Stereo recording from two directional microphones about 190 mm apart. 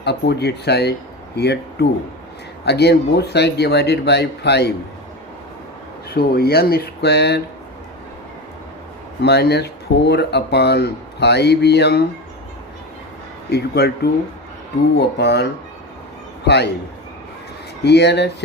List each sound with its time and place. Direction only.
0.0 s speech: 60° left (ahead or behind)
6.1 s speech: 55° left (ahead or behind)
9.2 s speech: 60° left (ahead or behind)
13.5 s speech: 60° left (ahead or behind)
16.5 s speech: 60° left (ahead or behind)
17.8 s speech: 60° left (ahead or behind)